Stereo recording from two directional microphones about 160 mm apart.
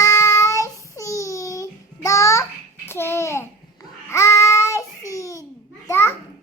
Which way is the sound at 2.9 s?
15° left (ahead or behind).